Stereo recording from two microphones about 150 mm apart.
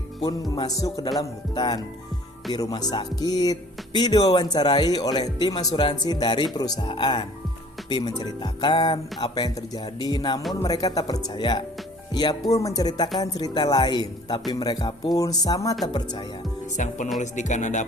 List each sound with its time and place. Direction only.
0.5 s speech: 25° left (ahead or behind)
16.7 s music: 55° left (ahead or behind)